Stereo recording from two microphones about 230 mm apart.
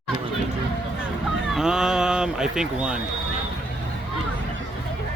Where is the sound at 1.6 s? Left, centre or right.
Centre.